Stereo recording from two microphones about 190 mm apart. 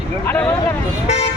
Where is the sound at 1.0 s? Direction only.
35° left (ahead or behind).